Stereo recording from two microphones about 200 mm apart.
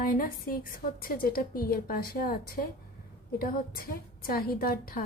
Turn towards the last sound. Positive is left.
turn(degrees=45)  # may be behind; listen again after turning